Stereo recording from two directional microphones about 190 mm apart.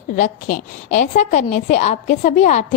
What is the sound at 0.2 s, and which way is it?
A woman's voice, 40° left (ahead or behind).